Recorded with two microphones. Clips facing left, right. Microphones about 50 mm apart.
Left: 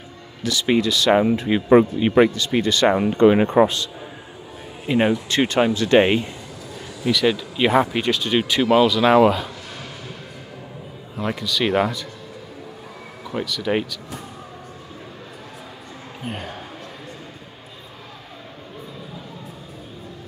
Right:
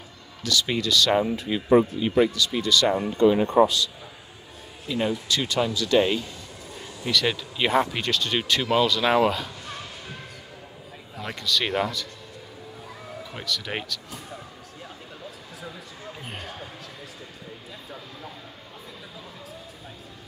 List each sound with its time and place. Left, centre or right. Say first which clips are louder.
0.4 s speech: left 6 dB; left
1.1 s speech: left 6 dB; left
7.1 s speech: left 6 dB; centre
11.2 s speech: left 4 dB; centre
11.7 s speech: left 6 dB; left
13.4 s speech: left 9 dB; centre